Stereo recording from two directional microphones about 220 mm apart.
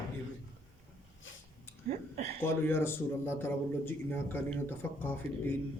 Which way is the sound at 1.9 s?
30° right (ahead or behind).